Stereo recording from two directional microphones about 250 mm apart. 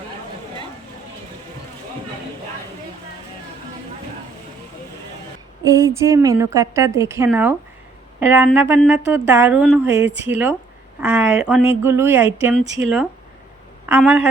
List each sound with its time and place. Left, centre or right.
5.6 s speech: centre
12.6 s speech: right
13.8 s speech: centre